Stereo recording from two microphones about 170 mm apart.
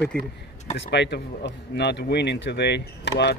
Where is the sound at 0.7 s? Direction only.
90° left.